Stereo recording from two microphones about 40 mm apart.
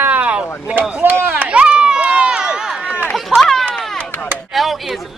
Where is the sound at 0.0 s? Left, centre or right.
Right.